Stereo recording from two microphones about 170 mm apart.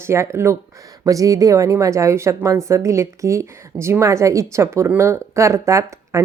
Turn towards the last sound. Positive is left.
turn(degrees=-15)  # may be behind; listen again after turning